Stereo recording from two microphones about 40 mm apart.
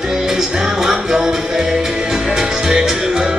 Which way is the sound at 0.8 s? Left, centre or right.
Centre.